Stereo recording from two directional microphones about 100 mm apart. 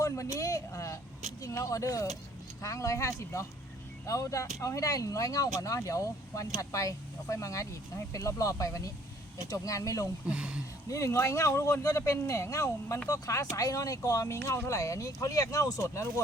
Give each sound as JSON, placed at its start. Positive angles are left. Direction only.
{"t": 0.0, "sound": "speech", "side_deg": 35}
{"t": 10.2, "sound": "speech", "side_deg": -10}
{"t": 10.8, "sound": "speech", "side_deg": 30}